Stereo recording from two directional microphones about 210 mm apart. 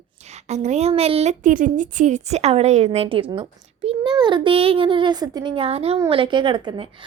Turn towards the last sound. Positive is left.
turn(degrees=-25)  # may be behind; listen again after turning